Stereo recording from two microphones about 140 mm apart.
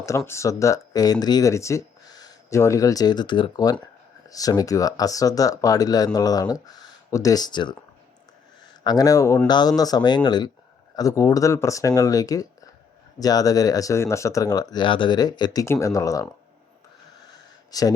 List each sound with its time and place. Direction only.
0.3 s speech: 20° left (ahead or behind)
8.8 s speech: 30° left (ahead or behind)
17.3 s a sound: 25° left (ahead or behind)